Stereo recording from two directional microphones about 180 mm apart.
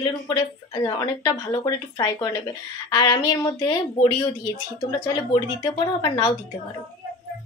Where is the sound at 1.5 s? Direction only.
20° left (ahead or behind).